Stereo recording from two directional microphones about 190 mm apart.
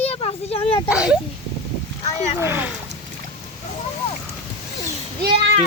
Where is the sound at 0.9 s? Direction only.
5° right (ahead or behind).